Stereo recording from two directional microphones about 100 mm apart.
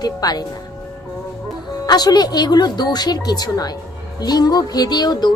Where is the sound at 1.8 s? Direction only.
40° left (ahead or behind).